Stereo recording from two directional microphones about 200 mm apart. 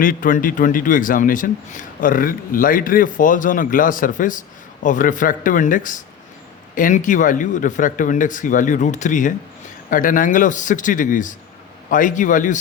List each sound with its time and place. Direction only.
0.0 s a man's voice: 45° left (ahead or behind)